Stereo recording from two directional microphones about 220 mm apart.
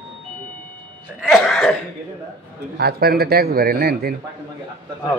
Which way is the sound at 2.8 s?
45° right (ahead or behind).